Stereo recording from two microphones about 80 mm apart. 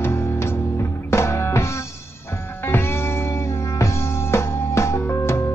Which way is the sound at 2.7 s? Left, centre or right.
Left.